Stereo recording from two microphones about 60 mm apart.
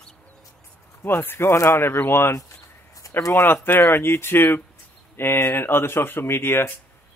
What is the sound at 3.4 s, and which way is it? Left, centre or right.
A man's voice, left.